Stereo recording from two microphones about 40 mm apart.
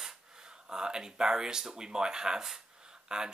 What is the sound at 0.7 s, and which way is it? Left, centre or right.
Speech, centre.